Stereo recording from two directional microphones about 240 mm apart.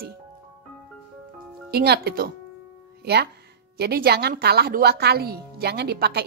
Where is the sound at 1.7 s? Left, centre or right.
Right.